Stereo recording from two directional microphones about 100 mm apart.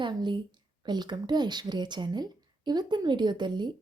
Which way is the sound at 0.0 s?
50° right (ahead or behind).